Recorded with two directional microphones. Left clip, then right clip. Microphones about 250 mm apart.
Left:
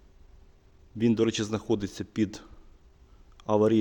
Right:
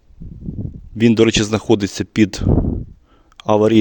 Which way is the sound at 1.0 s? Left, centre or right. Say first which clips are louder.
Right 12 dB; right.